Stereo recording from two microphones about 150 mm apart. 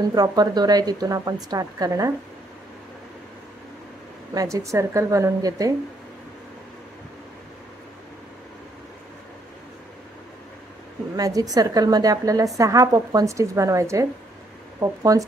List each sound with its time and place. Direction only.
0.1 s a woman's voice: 25° right (ahead or behind)
4.3 s a woman's voice: 25° right (ahead or behind)
11.1 s a woman's voice: 25° right (ahead or behind)